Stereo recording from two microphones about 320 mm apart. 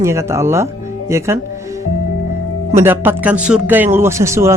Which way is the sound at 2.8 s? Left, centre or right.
Centre.